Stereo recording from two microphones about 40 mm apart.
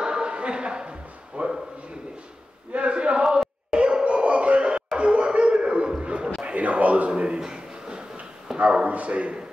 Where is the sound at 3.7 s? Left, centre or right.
Centre.